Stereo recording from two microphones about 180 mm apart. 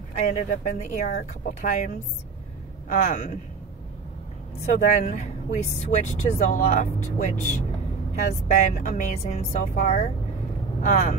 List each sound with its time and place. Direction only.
0.3 s speech: 40° left (ahead or behind)
2.9 s speech: 40° left (ahead or behind)
4.7 s speech: 40° left (ahead or behind)